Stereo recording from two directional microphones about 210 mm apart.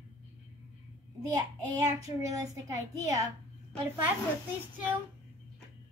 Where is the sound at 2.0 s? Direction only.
15° right (ahead or behind).